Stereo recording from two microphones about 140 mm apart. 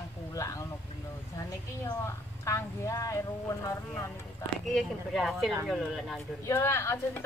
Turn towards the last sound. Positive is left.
turn(degrees=20)  # may be behind; listen again after turning